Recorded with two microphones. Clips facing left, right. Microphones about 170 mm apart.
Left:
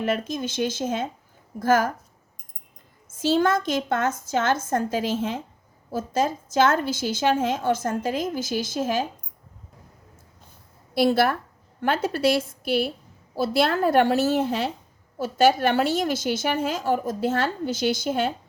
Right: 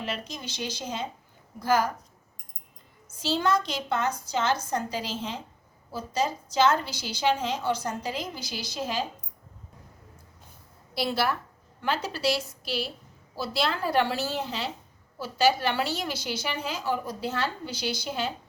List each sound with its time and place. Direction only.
0.0 s a woman's voice: 50° left (ahead or behind)
3.1 s a woman's voice: 50° left (ahead or behind)
10.9 s a woman's voice: 50° left (ahead or behind)